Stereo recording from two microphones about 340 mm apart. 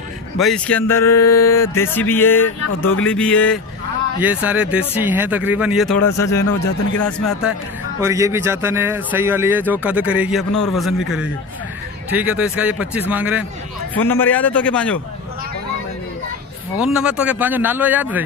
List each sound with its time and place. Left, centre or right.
0.4 s a man's voice: centre
1.2 s speech: left
1.5 s a man's voice: centre
6.4 s speech: left
8.0 s a man's voice: centre
14.0 s a man's voice: centre
16.8 s a man's voice: centre